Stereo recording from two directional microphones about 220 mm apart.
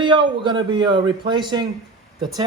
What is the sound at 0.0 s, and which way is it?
Speech, 20° right (ahead or behind).